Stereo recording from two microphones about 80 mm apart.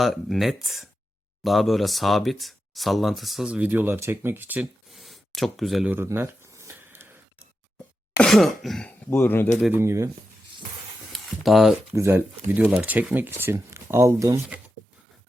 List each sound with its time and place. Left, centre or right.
0.0 s speech: centre
3.4 s speech: centre
4.9 s a sound: centre
6.0 s a sound: right
8.2 s speech: centre
9.0 s speech: left
9.7 s speech: right
11.1 s a sound: centre
11.9 s speech: right
12.5 s speech: centre; by 14.3 s right